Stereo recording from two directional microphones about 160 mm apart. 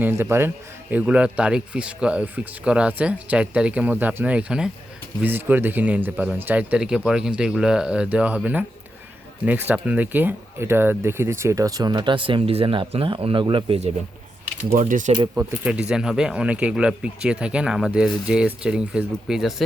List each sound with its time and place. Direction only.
0.0 s a man's voice: 15° right (ahead or behind); by 13.9 s 35° right (ahead or behind)
14.7 s speech: 55° right (ahead or behind)
15.4 s speech: 10° right (ahead or behind)